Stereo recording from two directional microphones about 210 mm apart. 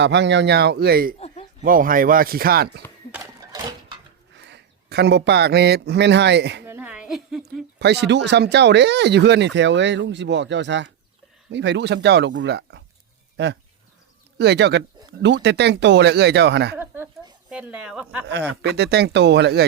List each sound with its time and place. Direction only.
0.0 s speech: 55° right (ahead or behind)
4.4 s speech: 50° right (ahead or behind)
6.7 s a sound: 10° right (ahead or behind)
7.8 s speech: 50° right (ahead or behind)
16.7 s a woman's voice: 10° right (ahead or behind)
18.6 s speech: 50° right (ahead or behind)